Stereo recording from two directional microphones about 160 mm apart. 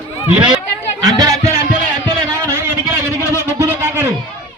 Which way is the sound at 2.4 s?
15° right (ahead or behind).